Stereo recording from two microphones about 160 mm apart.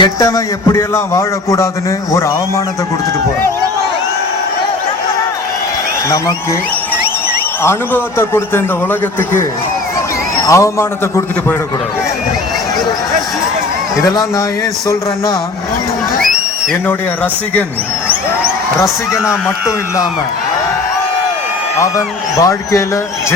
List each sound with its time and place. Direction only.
0.0 s speech: 20° left (ahead or behind)
7.6 s a man's voice: 15° left (ahead or behind)
10.4 s speech: 20° left (ahead or behind)
14.0 s speech: 20° left (ahead or behind)
18.8 s a man's voice: 20° left (ahead or behind)
21.8 s speech: 20° left (ahead or behind)